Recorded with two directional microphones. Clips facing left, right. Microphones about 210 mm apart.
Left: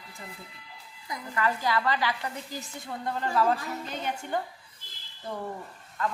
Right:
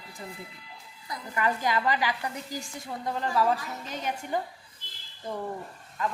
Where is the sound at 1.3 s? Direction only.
20° right (ahead or behind).